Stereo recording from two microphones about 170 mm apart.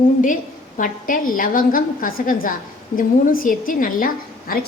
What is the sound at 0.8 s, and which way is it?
A woman's voice, 55° left (ahead or behind).